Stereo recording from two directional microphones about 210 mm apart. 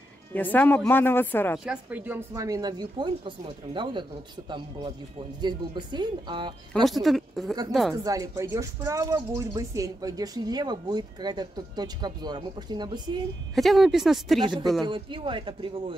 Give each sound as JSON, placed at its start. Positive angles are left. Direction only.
{"t": 0.3, "sound": "speech", "side_deg": 10}
{"t": 1.6, "sound": "speech", "side_deg": -5}
{"t": 6.7, "sound": "speech", "side_deg": 0}
{"t": 7.9, "sound": "speech", "side_deg": -15}
{"t": 13.6, "sound": "speech", "side_deg": 0}
{"t": 14.4, "sound": "speech", "side_deg": -20}